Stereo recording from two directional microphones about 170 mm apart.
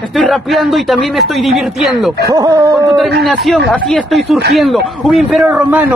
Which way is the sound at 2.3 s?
20° right (ahead or behind).